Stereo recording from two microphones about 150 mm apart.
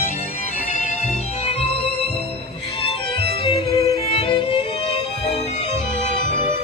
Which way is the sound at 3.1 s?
40° left (ahead or behind).